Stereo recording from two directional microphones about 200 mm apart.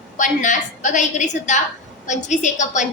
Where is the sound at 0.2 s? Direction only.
40° left (ahead or behind).